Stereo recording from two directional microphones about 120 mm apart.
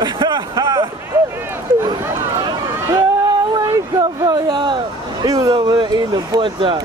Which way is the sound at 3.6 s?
35° right (ahead or behind).